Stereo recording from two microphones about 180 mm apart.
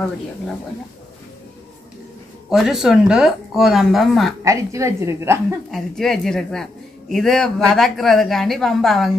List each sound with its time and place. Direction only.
2.5 s speech: centre (ahead or behind)
4.4 s a woman's voice: 15° right (ahead or behind)
5.7 s speech: centre (ahead or behind)